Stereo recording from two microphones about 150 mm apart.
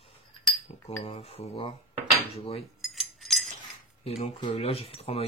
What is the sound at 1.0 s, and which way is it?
Speech, 40° left (ahead or behind).